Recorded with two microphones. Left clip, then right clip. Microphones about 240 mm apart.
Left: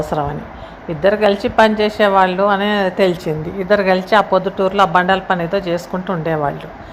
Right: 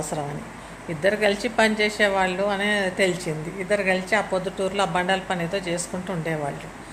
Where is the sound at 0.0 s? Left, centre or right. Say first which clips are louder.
Left 10 dB; centre.